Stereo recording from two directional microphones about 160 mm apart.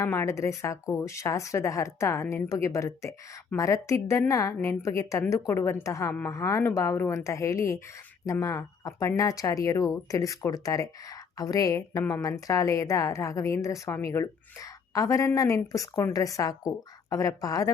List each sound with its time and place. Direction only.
0.0 s a woman's voice: 15° left (ahead or behind)